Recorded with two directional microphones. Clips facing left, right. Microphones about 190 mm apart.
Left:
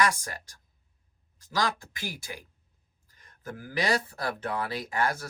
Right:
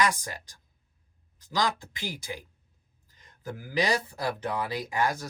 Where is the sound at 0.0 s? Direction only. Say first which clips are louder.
Even; 20° right (ahead or behind).